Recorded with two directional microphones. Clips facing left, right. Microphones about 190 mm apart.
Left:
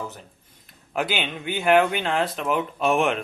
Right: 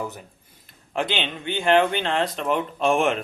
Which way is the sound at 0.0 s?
15° right (ahead or behind).